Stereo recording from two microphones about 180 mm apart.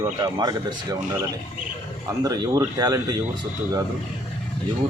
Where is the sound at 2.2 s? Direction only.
20° right (ahead or behind).